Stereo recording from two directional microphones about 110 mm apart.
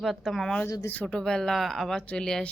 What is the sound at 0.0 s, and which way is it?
A woman's voice, centre (ahead or behind).